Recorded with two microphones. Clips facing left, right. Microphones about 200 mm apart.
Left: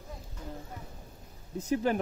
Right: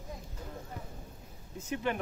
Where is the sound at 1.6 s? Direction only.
35° left (ahead or behind).